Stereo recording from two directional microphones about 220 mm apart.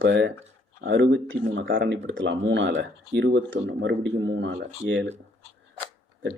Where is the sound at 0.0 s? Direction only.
55° right (ahead or behind).